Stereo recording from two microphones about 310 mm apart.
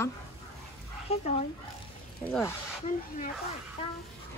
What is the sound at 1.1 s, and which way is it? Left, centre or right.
Speech, centre.